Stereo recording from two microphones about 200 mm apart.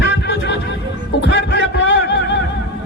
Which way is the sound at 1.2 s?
60° left (ahead or behind).